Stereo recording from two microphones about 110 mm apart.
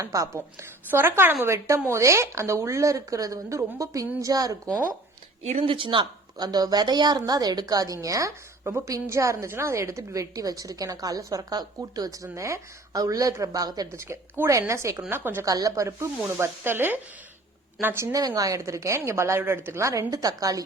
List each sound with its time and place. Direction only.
0.0 s a woman's voice: 30° right (ahead or behind)
5.4 s speech: 75° right (ahead or behind)
5.6 s a woman's voice: 50° right (ahead or behind); by 15.4 s 20° right (ahead or behind)
15.4 s a woman's voice: 30° right (ahead or behind)